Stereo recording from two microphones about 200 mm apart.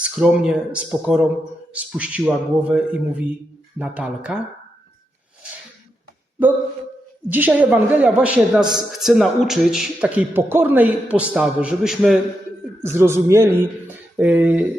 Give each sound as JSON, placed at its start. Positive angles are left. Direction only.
{"t": 0.0, "sound": "a man's voice", "side_deg": -5}
{"t": 7.3, "sound": "a man's voice", "side_deg": -10}
{"t": 12.8, "sound": "a man's voice", "side_deg": -10}